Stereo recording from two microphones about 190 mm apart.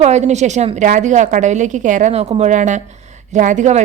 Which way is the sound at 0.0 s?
35° right (ahead or behind).